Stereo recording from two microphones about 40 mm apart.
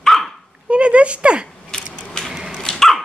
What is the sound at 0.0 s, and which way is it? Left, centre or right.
Dog, centre.